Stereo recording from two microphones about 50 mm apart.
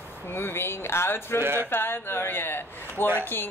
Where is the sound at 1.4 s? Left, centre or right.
Right.